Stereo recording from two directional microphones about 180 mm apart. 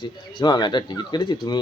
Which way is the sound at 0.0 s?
25° left (ahead or behind).